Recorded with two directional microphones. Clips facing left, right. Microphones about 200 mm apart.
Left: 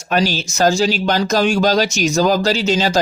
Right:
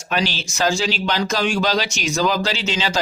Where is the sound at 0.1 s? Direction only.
45° left (ahead or behind).